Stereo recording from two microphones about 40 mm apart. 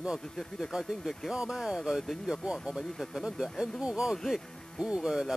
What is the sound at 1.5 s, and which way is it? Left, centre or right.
Speech, centre.